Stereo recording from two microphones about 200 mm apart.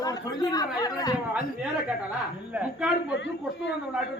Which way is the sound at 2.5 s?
5° right (ahead or behind).